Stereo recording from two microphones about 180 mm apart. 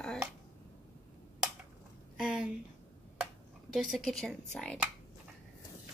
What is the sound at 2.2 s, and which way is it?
Speech, 5° right (ahead or behind).